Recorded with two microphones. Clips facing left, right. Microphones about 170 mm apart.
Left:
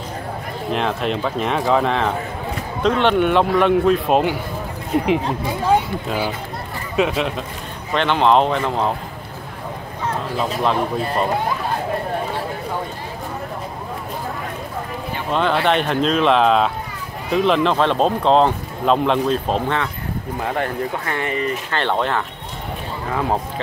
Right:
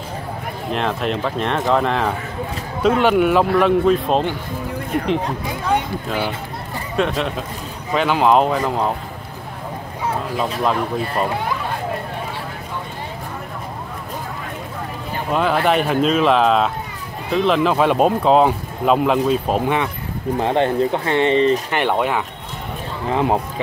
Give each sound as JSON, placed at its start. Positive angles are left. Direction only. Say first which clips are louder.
{"t": 0.7, "sound": "a man's voice", "louder": "even", "side_deg": 0}
{"t": 7.0, "sound": "a man's voice", "louder": "left 1 dB", "side_deg": 0}
{"t": 10.6, "sound": "a man's voice", "louder": "left 1 dB", "side_deg": -5}
{"t": 15.3, "sound": "a man's voice", "louder": "right 1 dB", "side_deg": -5}
{"t": 20.3, "sound": "speech", "louder": "right 6 dB", "side_deg": -25}
{"t": 21.7, "sound": "speech", "louder": "right 2 dB", "side_deg": -10}
{"t": 23.0, "sound": "speech", "louder": "right 3 dB", "side_deg": -20}